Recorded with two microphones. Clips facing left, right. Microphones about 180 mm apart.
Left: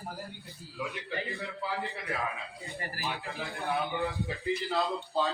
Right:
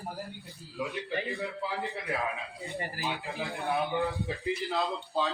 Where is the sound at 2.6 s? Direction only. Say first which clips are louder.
Right 3 dB; 15° right (ahead or behind).